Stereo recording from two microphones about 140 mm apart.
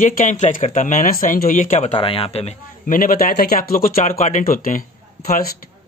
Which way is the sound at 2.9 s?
80° left.